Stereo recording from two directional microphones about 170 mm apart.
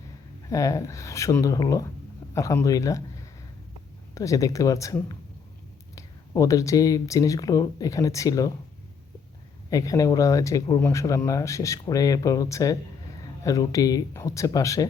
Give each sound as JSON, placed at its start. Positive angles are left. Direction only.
{"t": 0.5, "sound": "speech", "side_deg": 20}
{"t": 9.6, "sound": "speech", "side_deg": 20}